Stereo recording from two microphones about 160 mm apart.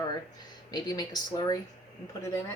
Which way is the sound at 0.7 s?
25° left (ahead or behind).